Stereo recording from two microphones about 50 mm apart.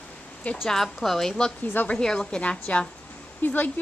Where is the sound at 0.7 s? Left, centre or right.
Centre; by 2.9 s left.